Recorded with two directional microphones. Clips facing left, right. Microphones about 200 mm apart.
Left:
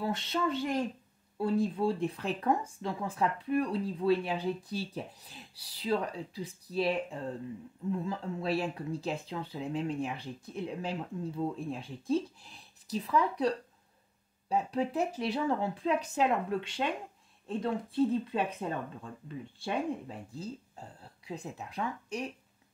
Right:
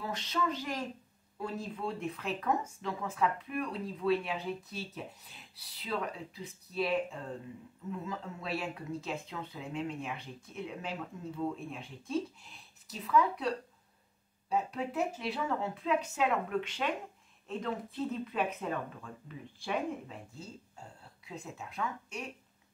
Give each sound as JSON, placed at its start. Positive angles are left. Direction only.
{"t": 0.0, "sound": "speech", "side_deg": 30}
{"t": 8.0, "sound": "speech", "side_deg": 35}
{"t": 14.5, "sound": "speech", "side_deg": 35}